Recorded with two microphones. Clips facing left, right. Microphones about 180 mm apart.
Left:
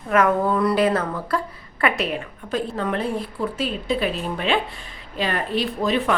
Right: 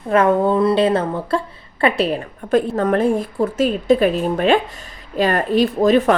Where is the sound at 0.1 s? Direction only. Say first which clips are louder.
Right 4 dB; 30° right (ahead or behind).